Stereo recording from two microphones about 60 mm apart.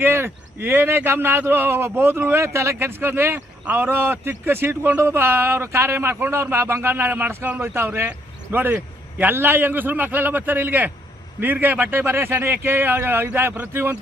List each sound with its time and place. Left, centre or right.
0.0 s speech: right
6.9 s speech: right
7.6 s speech: right
8.7 s a sound: right
9.3 s speech: right